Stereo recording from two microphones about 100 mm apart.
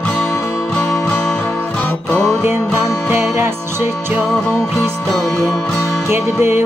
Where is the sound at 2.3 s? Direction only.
25° right (ahead or behind).